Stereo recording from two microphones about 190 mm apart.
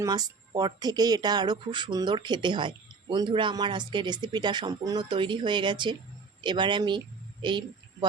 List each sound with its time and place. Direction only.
0.0 s speech: 20° right (ahead or behind)